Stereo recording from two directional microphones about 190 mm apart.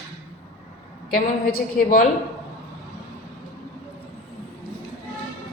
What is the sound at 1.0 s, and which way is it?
A woman's voice, 50° left (ahead or behind).